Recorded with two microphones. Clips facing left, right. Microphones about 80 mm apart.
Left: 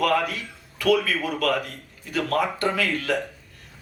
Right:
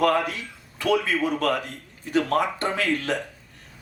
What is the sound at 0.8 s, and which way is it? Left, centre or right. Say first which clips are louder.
A man's voice: left 1 dB; right.